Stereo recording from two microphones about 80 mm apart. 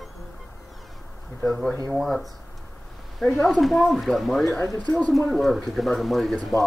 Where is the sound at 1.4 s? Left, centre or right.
Centre.